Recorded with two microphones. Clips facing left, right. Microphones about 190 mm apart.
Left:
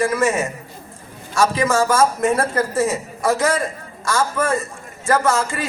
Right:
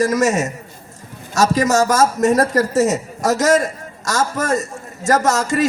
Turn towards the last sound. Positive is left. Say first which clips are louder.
# right 3 dB
turn(degrees=-40)  # may be behind; listen again after turning